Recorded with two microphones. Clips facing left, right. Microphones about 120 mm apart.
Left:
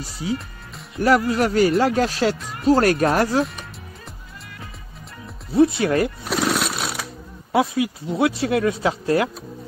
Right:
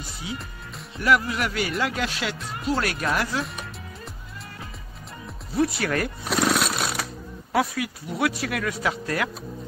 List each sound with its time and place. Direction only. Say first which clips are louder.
0.0 s speech: left 8 dB; 35° left (ahead or behind)
3.4 s music: even; centre (ahead or behind)
5.5 s speech: left 7 dB; 25° left (ahead or behind)
6.2 s jackhammer: left 1 dB; centre (ahead or behind)
7.5 s speech: left 5 dB; 20° left (ahead or behind)